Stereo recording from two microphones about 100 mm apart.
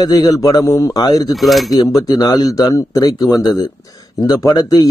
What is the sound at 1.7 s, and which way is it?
A man's voice, 40° left (ahead or behind).